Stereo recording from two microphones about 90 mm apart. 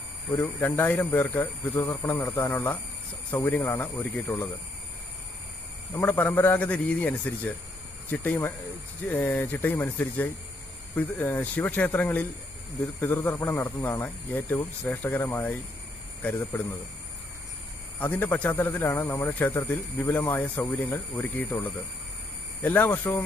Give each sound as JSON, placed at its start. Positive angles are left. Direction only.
{"t": 0.3, "sound": "speech", "side_deg": 25}
{"t": 5.9, "sound": "speech", "side_deg": 20}
{"t": 13.2, "sound": "speech", "side_deg": 25}
{"t": 18.0, "sound": "speech", "side_deg": 20}